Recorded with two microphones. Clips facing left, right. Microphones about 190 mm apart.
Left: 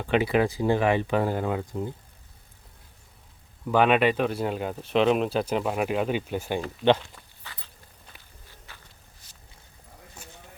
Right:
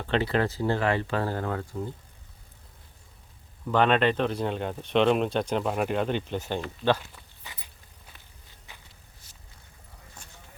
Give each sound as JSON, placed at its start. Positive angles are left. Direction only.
{"t": 0.0, "sound": "speech", "side_deg": 10}
{"t": 3.7, "sound": "speech", "side_deg": 10}
{"t": 7.4, "sound": "walk", "side_deg": -15}
{"t": 8.7, "sound": "a sound", "side_deg": -15}